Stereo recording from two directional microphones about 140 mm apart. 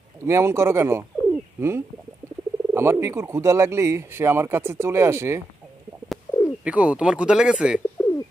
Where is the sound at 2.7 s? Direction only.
20° right (ahead or behind).